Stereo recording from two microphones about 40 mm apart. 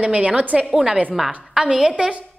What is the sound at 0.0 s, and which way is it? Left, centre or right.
Speech, right.